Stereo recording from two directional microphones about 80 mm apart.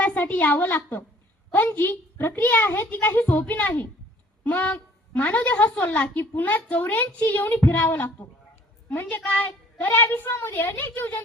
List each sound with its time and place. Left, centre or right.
0.0 s a woman's voice: centre